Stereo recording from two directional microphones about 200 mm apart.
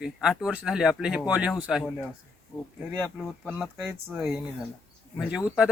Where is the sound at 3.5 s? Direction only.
5° right (ahead or behind).